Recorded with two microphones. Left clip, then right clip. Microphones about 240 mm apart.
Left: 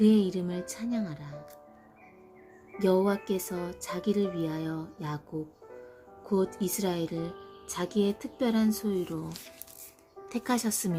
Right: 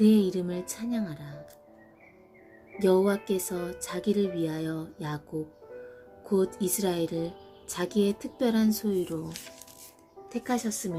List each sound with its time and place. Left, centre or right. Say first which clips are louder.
0.0 s speech: right 1 dB; centre
2.7 s speech: right 2 dB; centre
6.2 s speech: right 2 dB; centre
10.2 s speech: even; left